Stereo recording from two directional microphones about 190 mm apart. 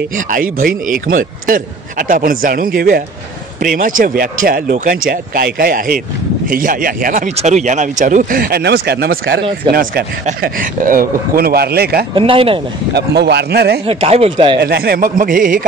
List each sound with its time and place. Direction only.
0.3 s speech: 50° right (ahead or behind)
12.2 s chopping: 30° right (ahead or behind)
12.9 s a man's voice: 60° right (ahead or behind)
13.8 s chopping: 30° right (ahead or behind)
14.6 s speech: 55° right (ahead or behind)